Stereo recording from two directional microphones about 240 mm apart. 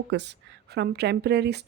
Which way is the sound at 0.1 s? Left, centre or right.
Right.